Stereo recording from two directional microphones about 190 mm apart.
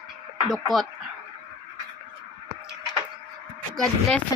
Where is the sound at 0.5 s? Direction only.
Centre (ahead or behind).